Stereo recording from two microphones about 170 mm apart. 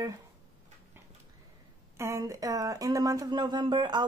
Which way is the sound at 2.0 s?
15° right (ahead or behind).